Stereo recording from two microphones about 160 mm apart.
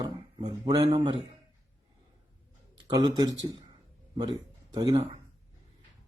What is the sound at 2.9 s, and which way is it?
A man's voice, 25° right (ahead or behind).